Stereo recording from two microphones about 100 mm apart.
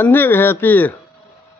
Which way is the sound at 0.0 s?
20° left (ahead or behind).